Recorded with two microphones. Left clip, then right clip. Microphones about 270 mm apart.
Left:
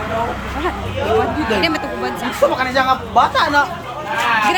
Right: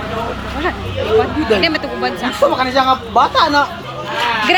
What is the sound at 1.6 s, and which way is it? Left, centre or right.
Speech, centre.